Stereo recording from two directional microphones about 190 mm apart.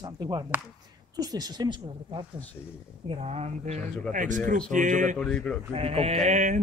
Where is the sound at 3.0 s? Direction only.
35° right (ahead or behind).